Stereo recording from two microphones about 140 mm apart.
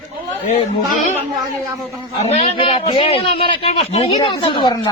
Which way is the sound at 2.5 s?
40° left (ahead or behind).